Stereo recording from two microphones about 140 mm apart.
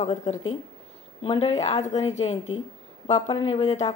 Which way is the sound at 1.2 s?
45° left (ahead or behind).